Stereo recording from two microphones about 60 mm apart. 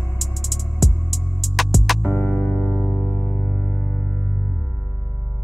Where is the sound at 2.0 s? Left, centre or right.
Left.